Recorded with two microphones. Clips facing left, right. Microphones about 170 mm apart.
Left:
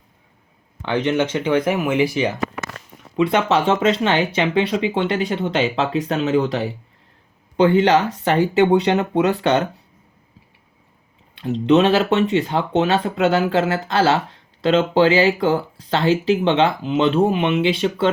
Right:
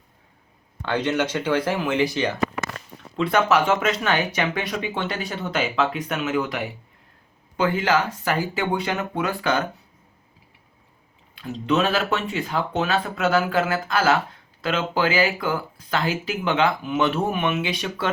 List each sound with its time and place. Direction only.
0.9 s speech: 15° left (ahead or behind)
5.7 s speech: 35° left (ahead or behind)
11.3 s speech: 25° left (ahead or behind)